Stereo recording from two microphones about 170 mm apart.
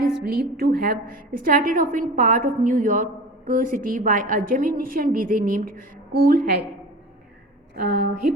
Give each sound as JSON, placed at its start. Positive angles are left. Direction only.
{"t": 0.2, "sound": "a woman's voice", "side_deg": -65}
{"t": 7.8, "sound": "a woman's voice", "side_deg": -60}